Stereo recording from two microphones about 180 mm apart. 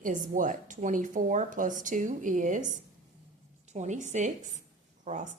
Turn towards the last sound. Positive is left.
turn(degrees=-45)  # may be behind; listen again after turning